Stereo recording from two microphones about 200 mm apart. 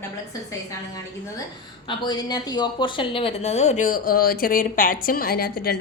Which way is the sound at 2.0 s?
20° left (ahead or behind).